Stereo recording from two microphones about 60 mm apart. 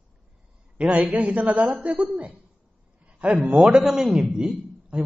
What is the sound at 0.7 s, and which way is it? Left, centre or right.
A man's voice, right.